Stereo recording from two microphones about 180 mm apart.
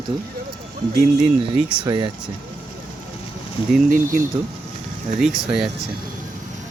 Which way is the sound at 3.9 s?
50° right (ahead or behind).